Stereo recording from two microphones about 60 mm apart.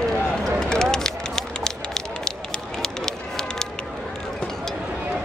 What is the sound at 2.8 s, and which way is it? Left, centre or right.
Music, centre.